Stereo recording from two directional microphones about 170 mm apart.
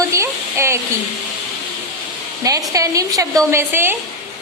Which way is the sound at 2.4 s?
20° right (ahead or behind).